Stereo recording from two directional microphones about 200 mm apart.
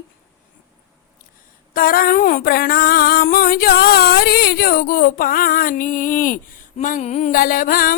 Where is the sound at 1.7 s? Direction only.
45° left (ahead or behind).